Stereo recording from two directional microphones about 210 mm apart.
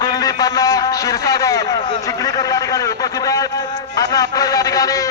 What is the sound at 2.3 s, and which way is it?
A man's voice, 15° left (ahead or behind).